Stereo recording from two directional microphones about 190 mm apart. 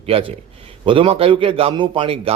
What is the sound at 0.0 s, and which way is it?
A man's voice, 30° right (ahead or behind).